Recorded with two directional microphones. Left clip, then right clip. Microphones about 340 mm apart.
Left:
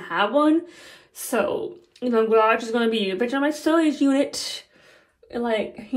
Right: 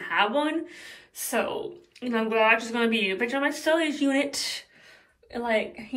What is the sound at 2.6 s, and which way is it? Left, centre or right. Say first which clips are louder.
Speech: left 3 dB; centre.